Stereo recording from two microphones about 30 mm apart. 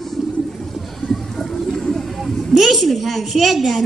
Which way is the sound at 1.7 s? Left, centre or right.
Centre.